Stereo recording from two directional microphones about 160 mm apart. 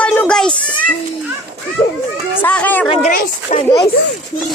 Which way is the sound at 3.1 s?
55° left (ahead or behind).